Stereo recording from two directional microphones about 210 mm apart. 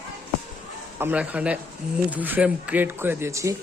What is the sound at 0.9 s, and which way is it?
A man's voice, 10° right (ahead or behind).